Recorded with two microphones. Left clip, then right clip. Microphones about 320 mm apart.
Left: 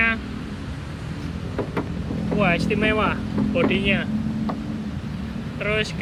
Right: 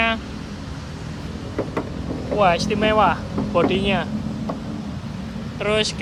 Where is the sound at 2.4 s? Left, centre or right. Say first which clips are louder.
Right 4 dB; right.